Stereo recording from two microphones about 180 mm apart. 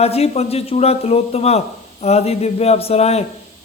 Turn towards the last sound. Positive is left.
turn(degrees=35)  # may be behind; listen again after turning